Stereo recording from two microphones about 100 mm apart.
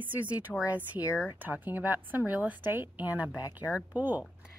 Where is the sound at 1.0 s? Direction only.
25° left (ahead or behind).